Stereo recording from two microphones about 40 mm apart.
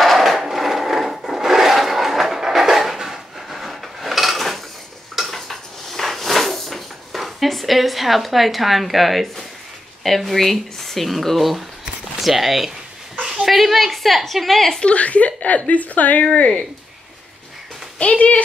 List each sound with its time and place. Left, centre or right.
0.0 s wood: centre
5.1 s dishes: centre
7.1 s a woman's voice: centre
14.8 s a woman's voice: left
17.9 s speech: left